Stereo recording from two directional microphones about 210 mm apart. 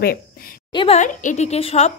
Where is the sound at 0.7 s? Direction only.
25° left (ahead or behind).